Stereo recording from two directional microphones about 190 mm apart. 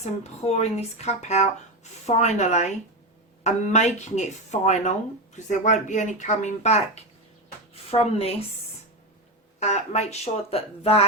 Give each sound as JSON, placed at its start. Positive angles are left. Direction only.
{"t": 0.0, "sound": "speech", "side_deg": 35}
{"t": 9.6, "sound": "speech", "side_deg": 35}